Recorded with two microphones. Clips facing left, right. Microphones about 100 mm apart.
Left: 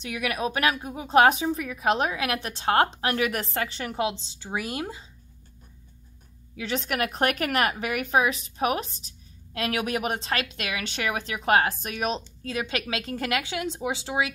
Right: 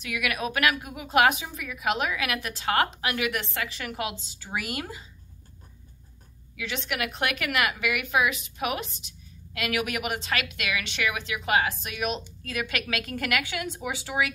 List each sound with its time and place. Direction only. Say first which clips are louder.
0.0 s a woman's voice: left 2 dB; 30° left (ahead or behind)
6.5 s a woman's voice: left 4 dB; 35° left (ahead or behind)